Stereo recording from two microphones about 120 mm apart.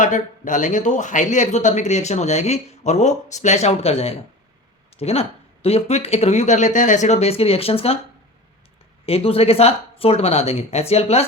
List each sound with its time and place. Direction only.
0.0 s speech: 90° left; by 7.9 s 55° left (ahead or behind)
9.0 s speech: 55° left (ahead or behind)